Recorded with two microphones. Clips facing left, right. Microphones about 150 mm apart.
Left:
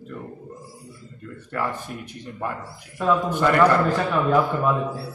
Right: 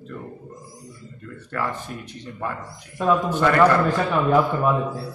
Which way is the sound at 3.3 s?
20° left (ahead or behind).